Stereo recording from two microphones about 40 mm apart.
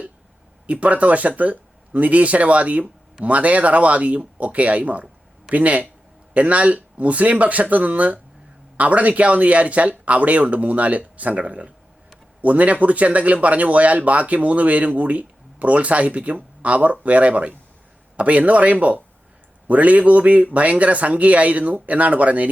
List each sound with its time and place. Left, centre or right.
0.7 s speech: right